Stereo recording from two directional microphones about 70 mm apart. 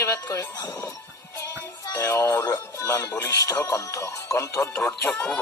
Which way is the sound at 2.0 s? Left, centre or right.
Left.